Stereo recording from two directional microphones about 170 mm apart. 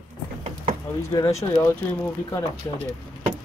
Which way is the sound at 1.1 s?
20° left (ahead or behind).